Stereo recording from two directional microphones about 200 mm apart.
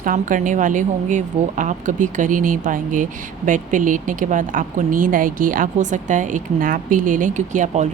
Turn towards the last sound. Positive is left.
turn(degrees=-35)  # may be behind; listen again after turning